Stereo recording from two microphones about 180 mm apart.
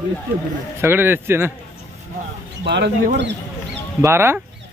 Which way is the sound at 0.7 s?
15° right (ahead or behind).